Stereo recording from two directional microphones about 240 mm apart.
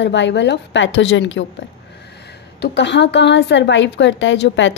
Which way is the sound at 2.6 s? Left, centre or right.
Left.